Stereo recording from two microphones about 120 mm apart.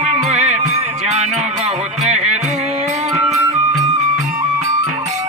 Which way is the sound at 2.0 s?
70° right (ahead or behind).